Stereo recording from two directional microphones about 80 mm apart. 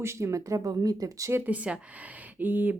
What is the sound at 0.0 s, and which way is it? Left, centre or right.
Speech, right.